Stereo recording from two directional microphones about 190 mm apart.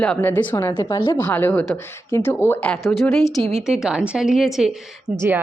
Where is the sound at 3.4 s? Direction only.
35° right (ahead or behind).